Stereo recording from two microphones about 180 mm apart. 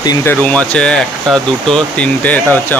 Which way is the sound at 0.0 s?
20° left (ahead or behind).